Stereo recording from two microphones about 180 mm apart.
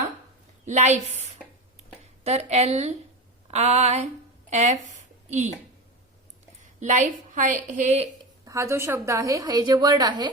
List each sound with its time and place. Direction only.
0.6 s a woman's voice: 40° right (ahead or behind)
4.4 s a sound: 40° right (ahead or behind)
6.6 s a woman's voice: 45° right (ahead or behind)
8.4 s a woman's voice: 15° right (ahead or behind)